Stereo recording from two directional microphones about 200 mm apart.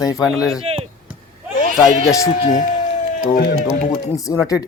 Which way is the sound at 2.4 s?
40° left (ahead or behind).